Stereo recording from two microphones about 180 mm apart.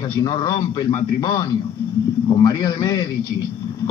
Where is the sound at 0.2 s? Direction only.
20° left (ahead or behind).